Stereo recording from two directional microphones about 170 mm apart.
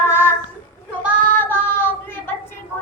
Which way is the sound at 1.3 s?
10° left (ahead or behind).